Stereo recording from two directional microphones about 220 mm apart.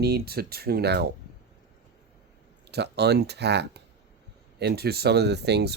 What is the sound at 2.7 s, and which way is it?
Speech, 50° right (ahead or behind).